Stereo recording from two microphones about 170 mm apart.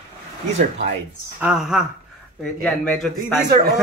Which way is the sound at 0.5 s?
45° right (ahead or behind).